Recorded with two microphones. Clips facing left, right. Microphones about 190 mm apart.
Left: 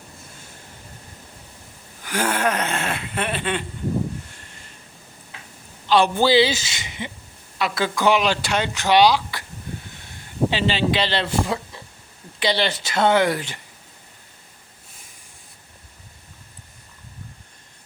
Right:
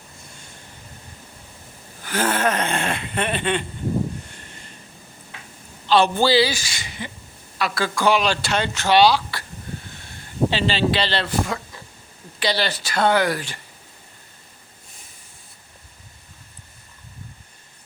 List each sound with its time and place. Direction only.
2.0 s speech: 10° left (ahead or behind)
4.3 s a sound: centre (ahead or behind)
5.9 s a woman's voice: 15° left (ahead or behind)
10.5 s a woman's voice: 15° left (ahead or behind)